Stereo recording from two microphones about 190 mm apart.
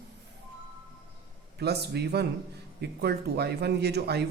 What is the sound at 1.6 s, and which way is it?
A man's voice, 60° right (ahead or behind).